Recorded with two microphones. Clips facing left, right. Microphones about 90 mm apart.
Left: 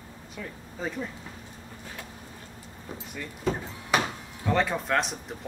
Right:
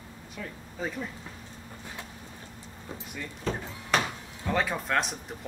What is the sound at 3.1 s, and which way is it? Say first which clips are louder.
Speech: left 3 dB; 5° left (ahead or behind).